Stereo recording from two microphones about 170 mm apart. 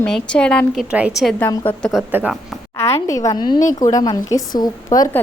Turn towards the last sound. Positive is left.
turn(degrees=20)  # may be behind; listen again after turning